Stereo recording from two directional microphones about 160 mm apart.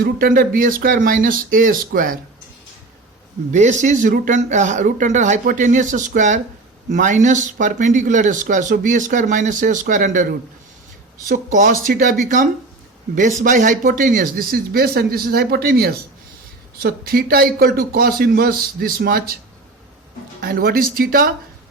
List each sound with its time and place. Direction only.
0.0 s speech: 65° right (ahead or behind)
3.5 s speech: 50° right (ahead or behind)
13.1 s speech: 55° right (ahead or behind)
20.4 s speech: 65° right (ahead or behind)